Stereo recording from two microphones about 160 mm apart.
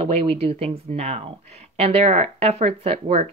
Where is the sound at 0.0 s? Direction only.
35° right (ahead or behind).